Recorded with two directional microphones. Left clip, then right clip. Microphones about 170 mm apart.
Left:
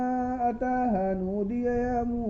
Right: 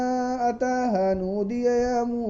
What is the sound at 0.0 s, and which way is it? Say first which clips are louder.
Mantra: right 3 dB; 40° right (ahead or behind).